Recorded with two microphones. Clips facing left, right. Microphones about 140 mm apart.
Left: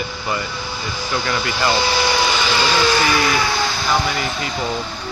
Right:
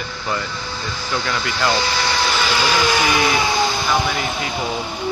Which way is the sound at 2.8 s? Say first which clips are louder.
Left 1 dB; 15° right (ahead or behind).